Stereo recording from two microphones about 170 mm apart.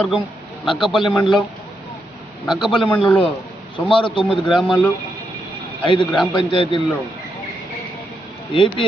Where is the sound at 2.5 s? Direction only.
Centre (ahead or behind).